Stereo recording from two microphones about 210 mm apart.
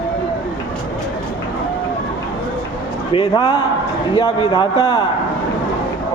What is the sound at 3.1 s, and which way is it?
Speech, 25° left (ahead or behind).